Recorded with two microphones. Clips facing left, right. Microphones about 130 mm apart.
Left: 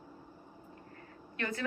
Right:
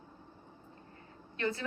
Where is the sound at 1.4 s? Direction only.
30° right (ahead or behind).